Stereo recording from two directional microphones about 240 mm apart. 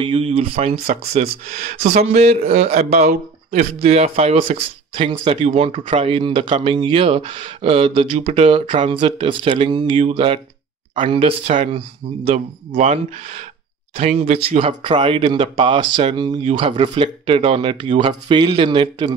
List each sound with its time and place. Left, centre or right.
0.0 s speech: right
1.6 s speech: right
2.0 s speech: right